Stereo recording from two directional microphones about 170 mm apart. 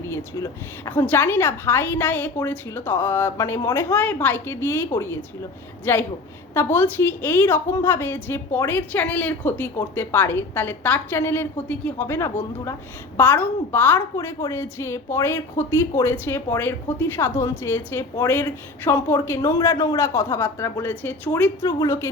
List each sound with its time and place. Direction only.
0.1 s a woman's voice: 20° left (ahead or behind)